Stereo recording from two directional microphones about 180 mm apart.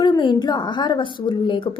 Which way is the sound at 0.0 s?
25° left (ahead or behind).